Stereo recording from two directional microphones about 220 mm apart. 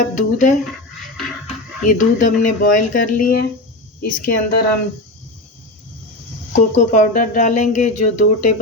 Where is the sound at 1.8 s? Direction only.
35° left (ahead or behind).